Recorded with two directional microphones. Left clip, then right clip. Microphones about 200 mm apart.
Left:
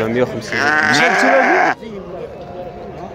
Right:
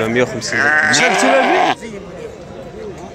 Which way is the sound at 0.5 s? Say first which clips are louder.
Right 1 dB; 55° left (ahead or behind).